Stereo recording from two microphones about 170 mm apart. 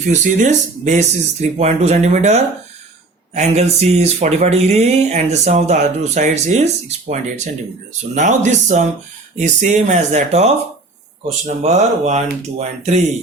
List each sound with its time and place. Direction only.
0.1 s speech: 45° right (ahead or behind)